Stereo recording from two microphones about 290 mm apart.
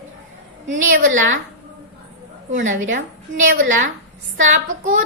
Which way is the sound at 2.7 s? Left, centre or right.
Right.